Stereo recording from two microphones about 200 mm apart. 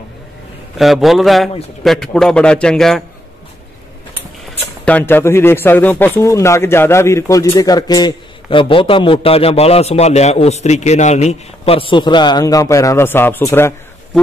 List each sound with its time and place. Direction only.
0.7 s a man's voice: centre (ahead or behind)
4.8 s speech: 10° left (ahead or behind)